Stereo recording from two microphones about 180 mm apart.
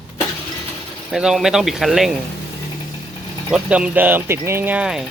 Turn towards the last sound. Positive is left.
turn(degrees=-5)  # may be behind; listen again after turning